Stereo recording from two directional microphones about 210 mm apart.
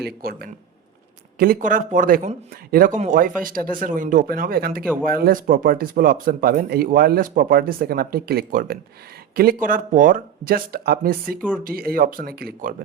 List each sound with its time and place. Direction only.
0.0 s speech: 45° right (ahead or behind)